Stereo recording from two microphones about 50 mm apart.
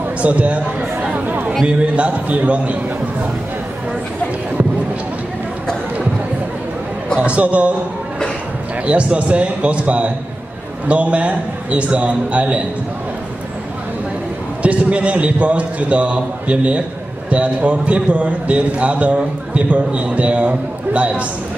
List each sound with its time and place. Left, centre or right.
0.2 s a man's voice: right
2.0 s a man's voice: right
7.2 s a man's voice: right
8.8 s a man's voice: right
14.6 s a man's voice: right